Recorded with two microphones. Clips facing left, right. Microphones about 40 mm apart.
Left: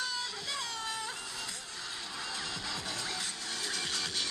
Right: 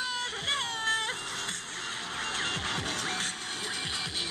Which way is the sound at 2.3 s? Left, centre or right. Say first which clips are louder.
Right 7 dB; right.